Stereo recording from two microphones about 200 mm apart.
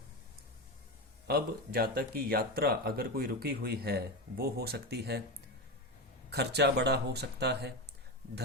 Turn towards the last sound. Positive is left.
turn(degrees=-55)  # may be behind; listen again after turning